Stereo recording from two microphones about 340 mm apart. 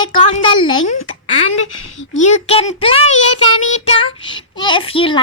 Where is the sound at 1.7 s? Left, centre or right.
Left.